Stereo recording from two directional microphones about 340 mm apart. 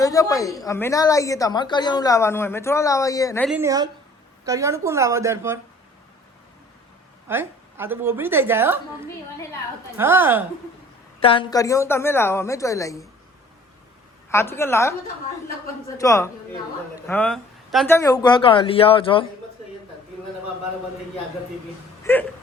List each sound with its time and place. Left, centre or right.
0.0 s a woman's voice: centre
7.3 s a woman's voice: centre
10.0 s a woman's voice: centre
11.2 s a woman's voice: centre
14.3 s a woman's voice: centre
16.0 s a woman's voice: centre
22.0 s music: centre